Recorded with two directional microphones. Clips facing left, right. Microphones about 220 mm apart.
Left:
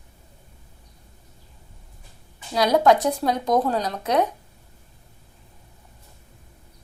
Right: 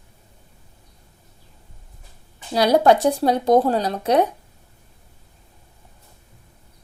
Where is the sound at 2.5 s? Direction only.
30° right (ahead or behind).